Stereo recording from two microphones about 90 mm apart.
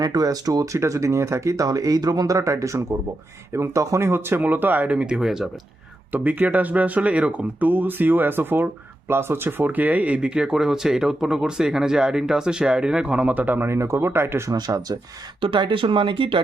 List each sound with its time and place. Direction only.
0.0 s speech: 45° right (ahead or behind); by 5.5 s 5° right (ahead or behind)
6.1 s speech: 20° right (ahead or behind)
14.5 s speech: 45° right (ahead or behind)
15.4 s speech: 70° right (ahead or behind)